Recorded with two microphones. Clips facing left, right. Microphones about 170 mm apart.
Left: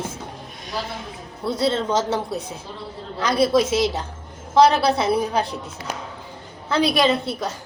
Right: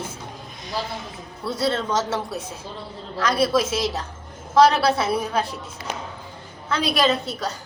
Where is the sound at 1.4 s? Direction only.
25° left (ahead or behind).